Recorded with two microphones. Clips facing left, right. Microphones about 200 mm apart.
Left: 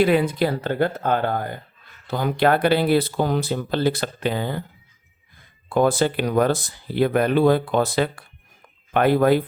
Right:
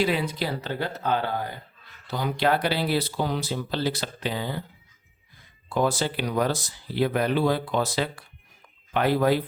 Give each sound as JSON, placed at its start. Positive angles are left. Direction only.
{"t": 0.0, "sound": "speech", "side_deg": 55}
{"t": 5.6, "sound": "speech", "side_deg": 55}